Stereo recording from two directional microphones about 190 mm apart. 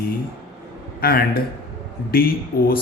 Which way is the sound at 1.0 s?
55° left (ahead or behind).